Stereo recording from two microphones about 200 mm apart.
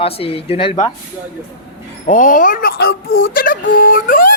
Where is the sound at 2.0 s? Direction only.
40° left (ahead or behind).